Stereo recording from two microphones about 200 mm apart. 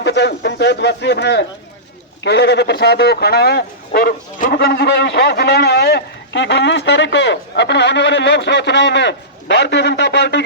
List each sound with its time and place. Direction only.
0.0 s speech: 60° left (ahead or behind)